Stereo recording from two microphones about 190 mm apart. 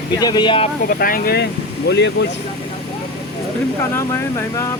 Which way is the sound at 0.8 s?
50° left (ahead or behind).